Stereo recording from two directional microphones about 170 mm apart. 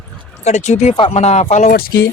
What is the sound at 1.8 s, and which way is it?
Speech, 60° left (ahead or behind).